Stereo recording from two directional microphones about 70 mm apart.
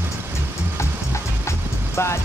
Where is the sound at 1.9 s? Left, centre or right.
Left.